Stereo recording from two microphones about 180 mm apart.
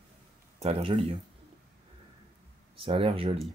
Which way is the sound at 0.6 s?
35° right (ahead or behind).